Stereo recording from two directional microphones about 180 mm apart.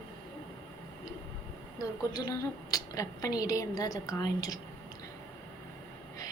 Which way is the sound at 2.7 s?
20° left (ahead or behind).